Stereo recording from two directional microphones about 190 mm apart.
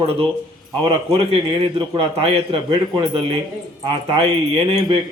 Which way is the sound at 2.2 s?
30° right (ahead or behind).